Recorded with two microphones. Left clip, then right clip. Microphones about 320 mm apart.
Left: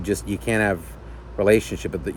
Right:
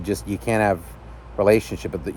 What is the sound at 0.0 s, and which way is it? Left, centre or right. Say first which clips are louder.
Speech: even; centre.